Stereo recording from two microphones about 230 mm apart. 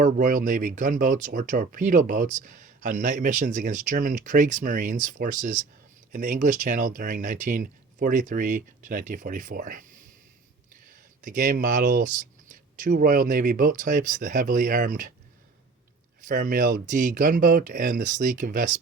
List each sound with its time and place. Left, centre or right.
0.0 s speech: right
11.2 s speech: right
16.2 s speech: right